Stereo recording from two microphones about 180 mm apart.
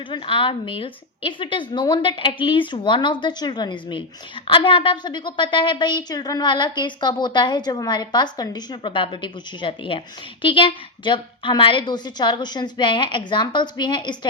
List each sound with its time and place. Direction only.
0.1 s a woman's voice: 30° left (ahead or behind)